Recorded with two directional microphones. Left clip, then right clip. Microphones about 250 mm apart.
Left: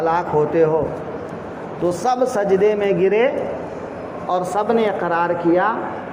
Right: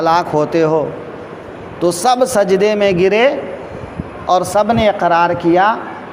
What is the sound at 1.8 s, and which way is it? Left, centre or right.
Speech, right.